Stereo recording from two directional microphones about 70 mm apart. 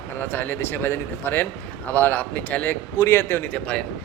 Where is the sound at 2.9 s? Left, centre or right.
Left.